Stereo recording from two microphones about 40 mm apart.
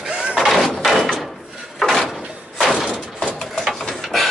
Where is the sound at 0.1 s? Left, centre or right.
Right.